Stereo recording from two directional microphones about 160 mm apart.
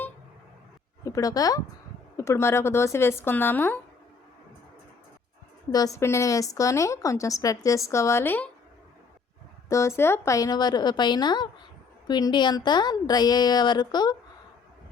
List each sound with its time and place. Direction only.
1.0 s a woman's voice: 20° left (ahead or behind)
5.7 s a woman's voice: 20° left (ahead or behind)
9.6 s a woman's voice: 20° left (ahead or behind)